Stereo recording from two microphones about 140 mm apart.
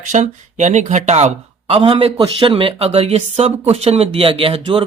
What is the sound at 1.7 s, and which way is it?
Speech, 40° right (ahead or behind).